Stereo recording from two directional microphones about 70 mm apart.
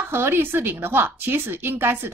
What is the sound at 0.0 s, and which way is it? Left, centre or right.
A woman's voice, right.